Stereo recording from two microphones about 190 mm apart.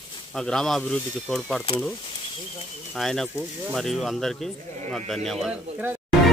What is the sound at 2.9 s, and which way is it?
Speech, centre (ahead or behind).